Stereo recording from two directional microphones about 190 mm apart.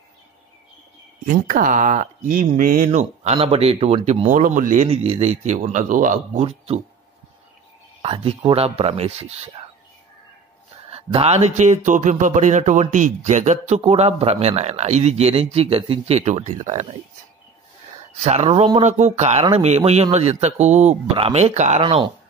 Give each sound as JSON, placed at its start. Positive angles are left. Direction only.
{"t": 1.2, "sound": "speech", "side_deg": -45}
{"t": 4.8, "sound": "speech", "side_deg": -30}
{"t": 6.4, "sound": "speech", "side_deg": -30}
{"t": 8.0, "sound": "speech", "side_deg": -30}
{"t": 10.9, "sound": "speech", "side_deg": -30}
{"t": 18.1, "sound": "speech", "side_deg": -35}